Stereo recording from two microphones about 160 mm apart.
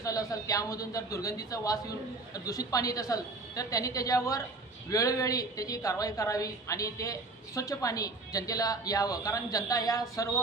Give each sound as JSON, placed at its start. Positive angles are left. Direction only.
{"t": 0.0, "sound": "a woman's voice", "side_deg": 20}